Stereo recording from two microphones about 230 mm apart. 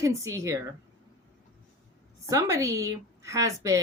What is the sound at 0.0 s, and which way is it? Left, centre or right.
Speech, centre.